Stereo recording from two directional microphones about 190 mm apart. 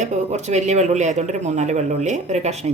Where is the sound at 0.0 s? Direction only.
40° right (ahead or behind).